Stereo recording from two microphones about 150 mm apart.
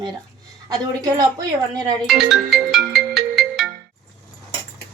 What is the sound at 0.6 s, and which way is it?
Speech, 25° right (ahead or behind).